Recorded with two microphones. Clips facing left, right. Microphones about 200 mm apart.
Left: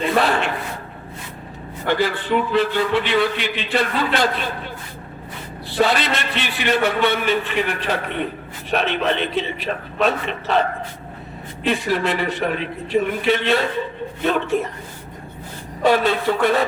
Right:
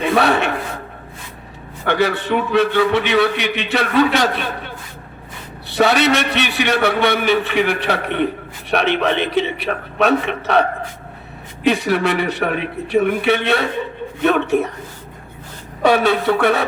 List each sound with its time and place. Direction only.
1.9 s a man's voice: 75° right (ahead or behind)
5.7 s a man's voice: 75° right (ahead or behind)
15.8 s a man's voice: 70° right (ahead or behind)